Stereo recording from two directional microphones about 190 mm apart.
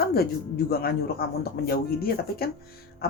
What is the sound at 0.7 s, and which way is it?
Speech, 55° left (ahead or behind).